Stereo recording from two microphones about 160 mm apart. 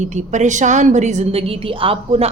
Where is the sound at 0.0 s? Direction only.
45° right (ahead or behind).